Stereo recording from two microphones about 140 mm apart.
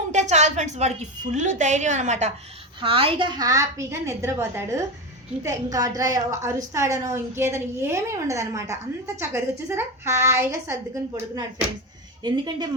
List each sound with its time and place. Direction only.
0.1 s a woman's voice: 55° right (ahead or behind)
2.8 s a woman's voice: 40° right (ahead or behind); by 10.8 s 20° right (ahead or behind)
12.2 s speech: 35° right (ahead or behind)